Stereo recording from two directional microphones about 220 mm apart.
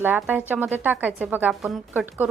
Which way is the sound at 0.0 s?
10° right (ahead or behind).